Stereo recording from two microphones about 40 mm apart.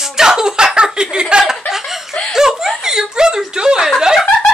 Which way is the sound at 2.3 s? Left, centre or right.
Centre.